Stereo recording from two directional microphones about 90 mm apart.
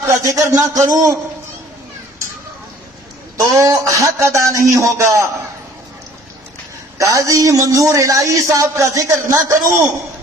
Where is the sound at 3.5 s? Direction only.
35° right (ahead or behind).